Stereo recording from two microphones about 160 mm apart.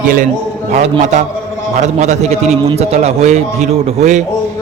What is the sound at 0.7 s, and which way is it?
A man's voice, 50° right (ahead or behind).